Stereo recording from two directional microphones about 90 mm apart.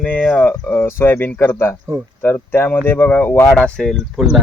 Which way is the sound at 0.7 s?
25° left (ahead or behind).